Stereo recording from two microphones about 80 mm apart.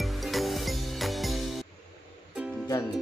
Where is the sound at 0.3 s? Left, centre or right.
Centre.